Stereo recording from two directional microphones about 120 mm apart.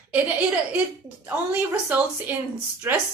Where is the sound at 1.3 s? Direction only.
10° right (ahead or behind).